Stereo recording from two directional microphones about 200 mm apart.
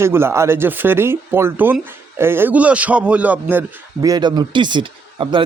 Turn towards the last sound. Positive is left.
turn(degrees=-25)  # may be behind; listen again after turning